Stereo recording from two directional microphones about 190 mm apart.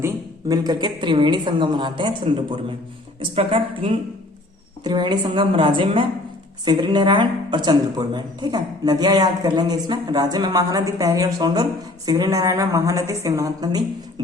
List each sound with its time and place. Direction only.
0.0 s a woman's voice: 20° right (ahead or behind)